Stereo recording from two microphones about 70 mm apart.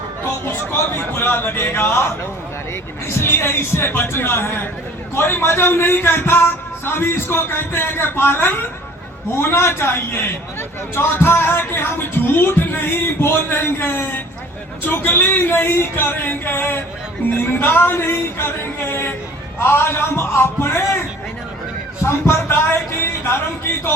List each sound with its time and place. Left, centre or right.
0.4 s a man's voice: left
22.0 s a man's voice: left